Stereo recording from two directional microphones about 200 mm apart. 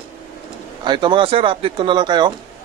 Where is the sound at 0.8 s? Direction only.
25° right (ahead or behind).